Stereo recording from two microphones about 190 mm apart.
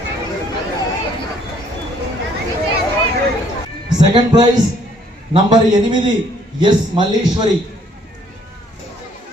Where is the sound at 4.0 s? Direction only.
20° right (ahead or behind).